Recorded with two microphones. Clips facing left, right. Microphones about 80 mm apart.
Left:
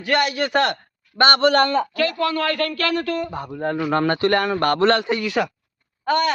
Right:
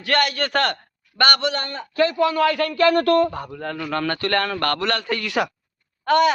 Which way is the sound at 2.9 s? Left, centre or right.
Right.